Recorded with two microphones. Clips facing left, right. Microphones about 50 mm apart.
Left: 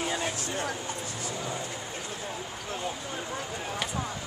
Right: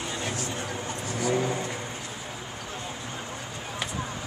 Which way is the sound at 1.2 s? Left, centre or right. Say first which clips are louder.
Right 9 dB; right.